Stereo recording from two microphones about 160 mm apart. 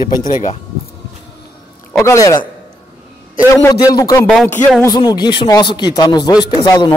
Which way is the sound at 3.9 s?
20° left (ahead or behind).